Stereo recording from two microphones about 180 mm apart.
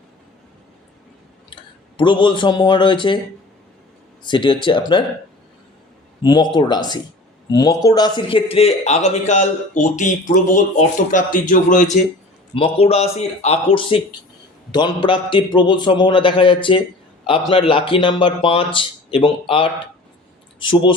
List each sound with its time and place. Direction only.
1.5 s speech: 25° left (ahead or behind)
4.2 s speech: 25° left (ahead or behind)
6.2 s speech: 25° left (ahead or behind); by 12.0 s 45° left (ahead or behind)
12.5 s speech: 30° left (ahead or behind)